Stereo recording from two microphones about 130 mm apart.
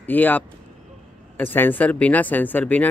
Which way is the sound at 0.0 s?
15° left (ahead or behind).